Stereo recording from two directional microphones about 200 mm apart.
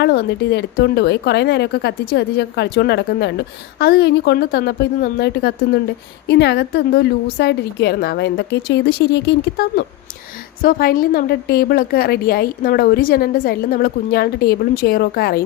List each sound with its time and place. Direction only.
0.0 s a woman's voice: 55° left (ahead or behind)